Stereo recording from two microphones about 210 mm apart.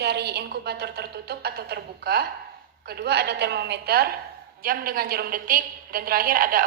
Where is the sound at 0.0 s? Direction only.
50° right (ahead or behind).